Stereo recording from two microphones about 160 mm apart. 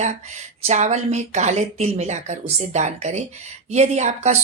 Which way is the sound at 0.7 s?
45° right (ahead or behind).